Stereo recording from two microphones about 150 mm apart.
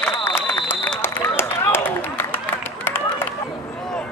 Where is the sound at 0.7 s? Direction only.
15° left (ahead or behind).